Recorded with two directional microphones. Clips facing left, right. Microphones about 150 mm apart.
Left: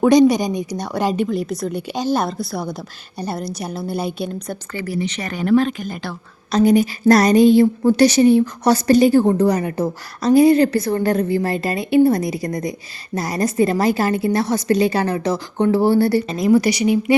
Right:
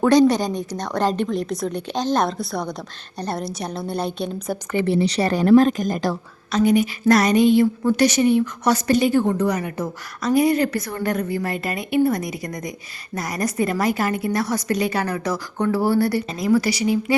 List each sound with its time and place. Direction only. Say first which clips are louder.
0.0 s a woman's voice: left 3 dB; 15° left (ahead or behind)
4.7 s a woman's voice: right 5 dB; 25° right (ahead or behind); by 6.1 s 40° right (ahead or behind)
6.5 s a woman's voice: left 3 dB; 35° left (ahead or behind); by 17.2 s 20° left (ahead or behind)